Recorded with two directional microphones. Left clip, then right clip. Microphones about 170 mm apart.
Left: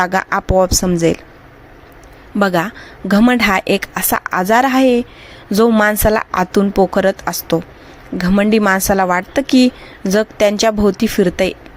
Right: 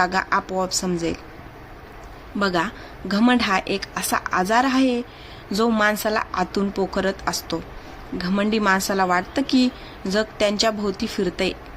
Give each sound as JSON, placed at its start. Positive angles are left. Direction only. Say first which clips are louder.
{"t": 0.0, "sound": "a woman's voice", "louder": "left 5 dB", "side_deg": 45}
{"t": 2.4, "sound": "a woman's voice", "louder": "left 7 dB", "side_deg": 45}